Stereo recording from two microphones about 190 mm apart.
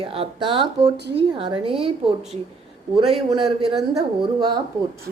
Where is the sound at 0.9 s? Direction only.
65° right (ahead or behind).